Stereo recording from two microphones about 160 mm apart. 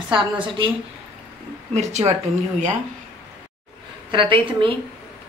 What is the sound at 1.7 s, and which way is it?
Speech, 45° right (ahead or behind).